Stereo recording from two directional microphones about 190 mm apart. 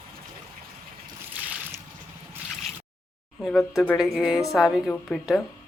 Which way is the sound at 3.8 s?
Centre (ahead or behind).